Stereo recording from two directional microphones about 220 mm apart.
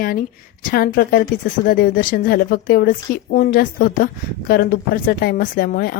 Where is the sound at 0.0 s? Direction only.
40° left (ahead or behind).